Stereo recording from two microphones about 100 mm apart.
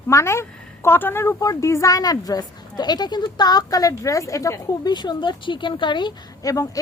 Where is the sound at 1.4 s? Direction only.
35° left (ahead or behind).